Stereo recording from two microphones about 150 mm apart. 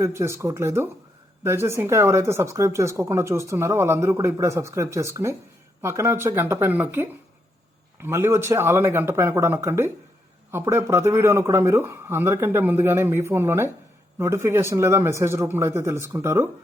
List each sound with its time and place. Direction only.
0.0 s speech: 20° right (ahead or behind)